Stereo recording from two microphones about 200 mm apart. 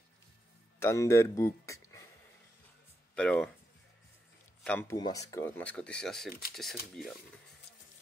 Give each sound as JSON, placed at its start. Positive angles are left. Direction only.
{"t": 0.7, "sound": "speech", "side_deg": 15}
{"t": 3.2, "sound": "speech", "side_deg": 5}
{"t": 4.6, "sound": "speech", "side_deg": 10}